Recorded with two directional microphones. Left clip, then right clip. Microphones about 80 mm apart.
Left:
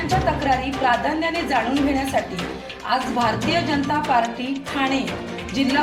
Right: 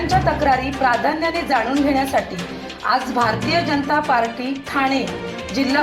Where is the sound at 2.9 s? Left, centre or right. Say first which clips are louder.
Right 2 dB; centre.